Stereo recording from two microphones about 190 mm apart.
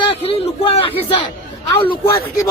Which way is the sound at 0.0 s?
30° left (ahead or behind).